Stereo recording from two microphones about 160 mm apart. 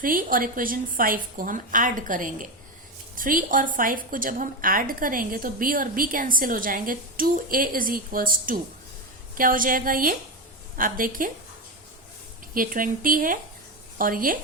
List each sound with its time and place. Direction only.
0.0 s a woman's voice: 60° right (ahead or behind)
12.5 s a woman's voice: 60° right (ahead or behind)